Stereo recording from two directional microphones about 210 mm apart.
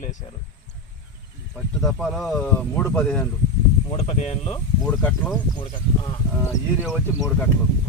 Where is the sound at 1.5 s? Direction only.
Centre (ahead or behind).